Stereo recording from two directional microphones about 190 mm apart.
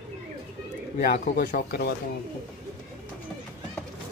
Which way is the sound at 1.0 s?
45° left (ahead or behind).